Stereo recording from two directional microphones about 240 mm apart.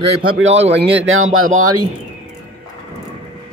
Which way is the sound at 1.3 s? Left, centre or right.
Right.